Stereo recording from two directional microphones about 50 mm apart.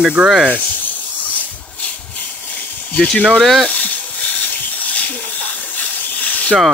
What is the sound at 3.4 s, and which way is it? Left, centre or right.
Speech, centre.